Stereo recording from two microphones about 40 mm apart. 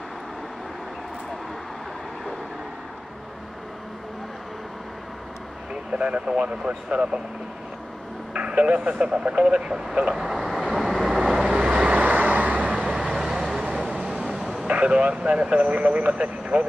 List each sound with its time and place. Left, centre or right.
5.9 s speech: right
8.3 s speech: right
10.1 s vehicle: centre
11.4 s vehicle: right
12.9 s vehicle: centre
13.8 s vehicle: right
14.6 s speech: right